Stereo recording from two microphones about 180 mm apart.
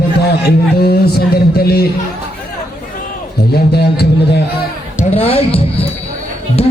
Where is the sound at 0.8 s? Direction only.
60° left (ahead or behind).